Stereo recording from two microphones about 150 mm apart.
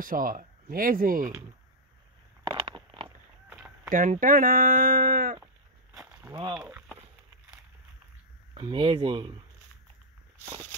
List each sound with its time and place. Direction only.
0.0 s speech: 70° right (ahead or behind)
3.4 s a sound: 10° right (ahead or behind)
3.9 s speech: 60° right (ahead or behind)
6.3 s speech: 25° right (ahead or behind)
6.6 s a sound: 5° right (ahead or behind)
8.5 s speech: 30° right (ahead or behind)